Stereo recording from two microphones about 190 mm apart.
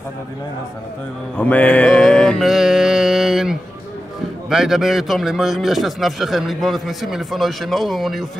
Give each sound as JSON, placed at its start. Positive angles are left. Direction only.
{"t": 1.3, "sound": "mantra", "side_deg": 10}
{"t": 4.5, "sound": "a man's voice", "side_deg": 0}